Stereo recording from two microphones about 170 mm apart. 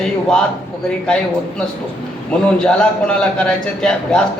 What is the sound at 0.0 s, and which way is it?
Speech, 5° left (ahead or behind).